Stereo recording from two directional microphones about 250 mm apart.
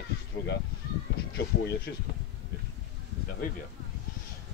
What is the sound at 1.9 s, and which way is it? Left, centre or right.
Speech, left.